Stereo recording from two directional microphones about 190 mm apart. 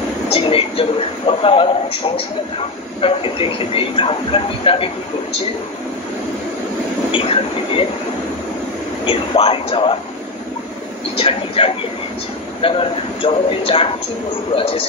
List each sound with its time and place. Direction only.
0.3 s a man's voice: 30° left (ahead or behind)
7.1 s a man's voice: 30° left (ahead or behind)
9.0 s a man's voice: 30° left (ahead or behind)
11.1 s a man's voice: 30° left (ahead or behind)